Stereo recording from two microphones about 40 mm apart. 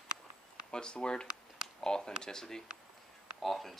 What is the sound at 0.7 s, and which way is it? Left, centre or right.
Speech, left.